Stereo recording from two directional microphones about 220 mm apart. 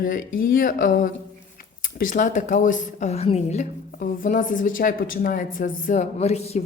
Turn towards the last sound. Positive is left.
turn(degrees=30)  # may be behind; listen again after turning